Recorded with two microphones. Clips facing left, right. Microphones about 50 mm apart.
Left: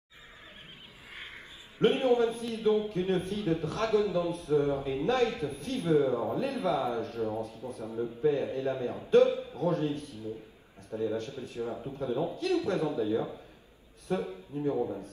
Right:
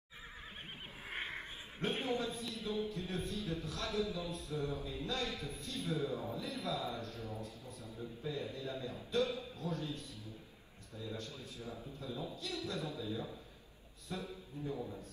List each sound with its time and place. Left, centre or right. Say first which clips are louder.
1.1 s a sound: right 3 dB; right
1.8 s a man's voice: left 13 dB; left
14.5 s a man's voice: left 12 dB; left